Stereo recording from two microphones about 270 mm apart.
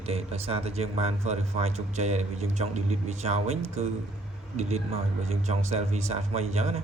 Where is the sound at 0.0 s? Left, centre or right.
Right.